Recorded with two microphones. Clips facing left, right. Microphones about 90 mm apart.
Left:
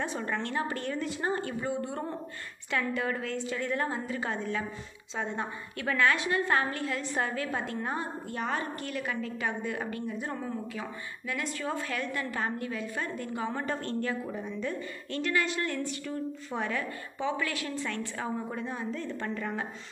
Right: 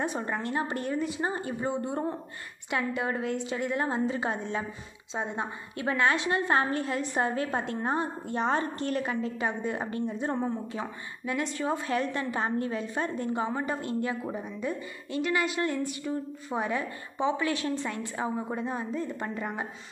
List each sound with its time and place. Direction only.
0.0 s a woman's voice: 15° right (ahead or behind)
13.5 s a woman's voice: 15° right (ahead or behind)